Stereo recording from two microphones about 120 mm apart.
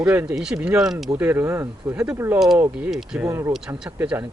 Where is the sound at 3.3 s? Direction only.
25° right (ahead or behind).